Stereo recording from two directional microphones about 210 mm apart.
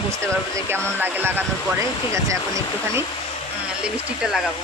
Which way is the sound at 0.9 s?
10° right (ahead or behind).